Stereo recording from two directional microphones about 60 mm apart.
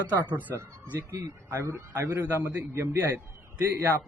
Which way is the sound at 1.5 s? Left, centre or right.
Right.